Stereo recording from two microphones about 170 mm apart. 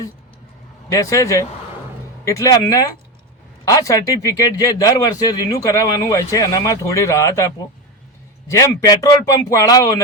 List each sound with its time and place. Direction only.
0.9 s speech: 20° left (ahead or behind)